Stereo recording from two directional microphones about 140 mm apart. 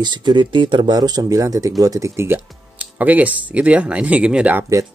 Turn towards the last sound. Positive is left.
turn(degrees=-10)  # may be behind; listen again after turning